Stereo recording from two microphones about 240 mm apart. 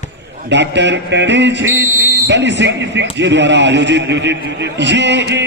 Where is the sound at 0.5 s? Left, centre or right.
Right.